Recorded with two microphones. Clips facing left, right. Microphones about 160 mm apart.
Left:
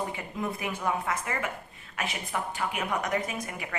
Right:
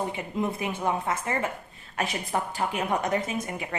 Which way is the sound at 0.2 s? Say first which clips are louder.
Right 4 dB; 25° right (ahead or behind).